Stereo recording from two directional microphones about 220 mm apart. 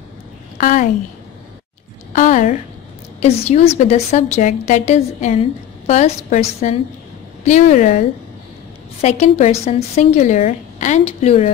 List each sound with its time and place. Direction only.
0.6 s a woman's voice: 35° left (ahead or behind)
2.1 s a woman's voice: 35° left (ahead or behind)
9.0 s a woman's voice: 30° left (ahead or behind)